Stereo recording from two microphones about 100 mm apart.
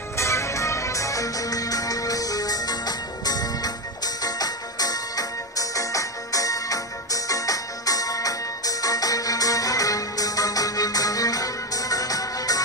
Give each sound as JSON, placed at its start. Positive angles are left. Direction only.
{"t": 0.2, "sound": "music", "side_deg": 30}